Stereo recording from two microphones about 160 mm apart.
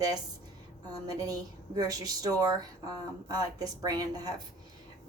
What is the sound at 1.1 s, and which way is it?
Speech, 25° right (ahead or behind).